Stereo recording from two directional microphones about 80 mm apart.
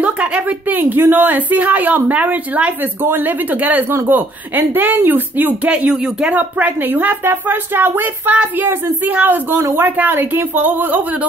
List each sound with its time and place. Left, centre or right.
0.0 s a woman's voice: centre
5.8 s speech: centre
6.3 s a woman's voice: centre